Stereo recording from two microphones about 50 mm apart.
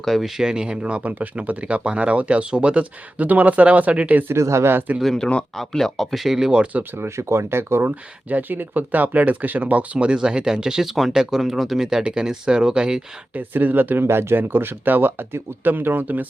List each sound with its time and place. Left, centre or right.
0.0 s speech: centre
0.3 s speech: centre; by 4.3 s right
4.3 s speech: right
5.5 s speech: centre
6.2 s speech: centre
6.7 s speech: right
7.2 s speech: right
7.9 s speech: right; by 13.0 s centre
13.3 s speech: right
14.0 s speech: right